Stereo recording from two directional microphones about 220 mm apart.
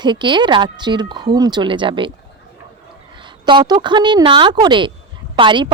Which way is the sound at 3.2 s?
20° right (ahead or behind).